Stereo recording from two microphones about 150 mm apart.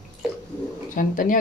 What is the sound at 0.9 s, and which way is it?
Speech, 65° left (ahead or behind).